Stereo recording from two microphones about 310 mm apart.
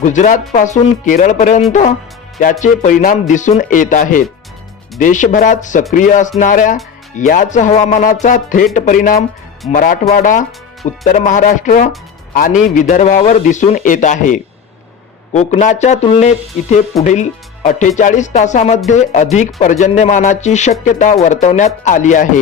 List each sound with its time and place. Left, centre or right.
0.0 s speech: left